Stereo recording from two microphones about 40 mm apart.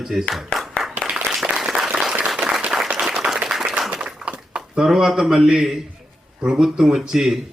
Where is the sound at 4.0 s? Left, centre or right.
Right.